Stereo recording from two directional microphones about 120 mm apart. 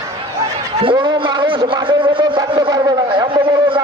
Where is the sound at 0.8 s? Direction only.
45° right (ahead or behind).